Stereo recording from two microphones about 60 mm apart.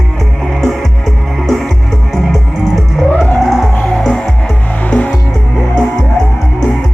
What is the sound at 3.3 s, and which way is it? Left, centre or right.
Music, centre.